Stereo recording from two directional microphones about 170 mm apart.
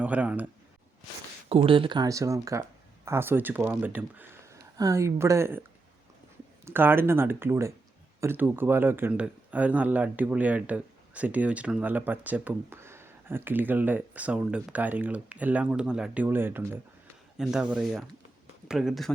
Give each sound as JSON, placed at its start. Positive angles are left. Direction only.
{"t": 0.0, "sound": "speech", "side_deg": -10}
{"t": 1.5, "sound": "speech", "side_deg": -35}
{"t": 6.7, "sound": "speech", "side_deg": -15}